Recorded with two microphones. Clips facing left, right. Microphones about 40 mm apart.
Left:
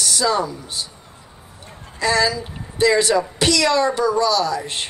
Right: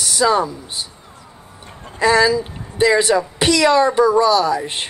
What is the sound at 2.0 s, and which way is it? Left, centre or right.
A woman's voice, right.